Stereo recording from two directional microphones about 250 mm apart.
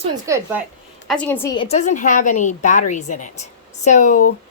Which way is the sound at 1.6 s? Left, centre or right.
Left.